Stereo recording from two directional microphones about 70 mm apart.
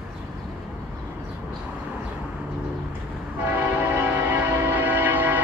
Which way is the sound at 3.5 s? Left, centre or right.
Right.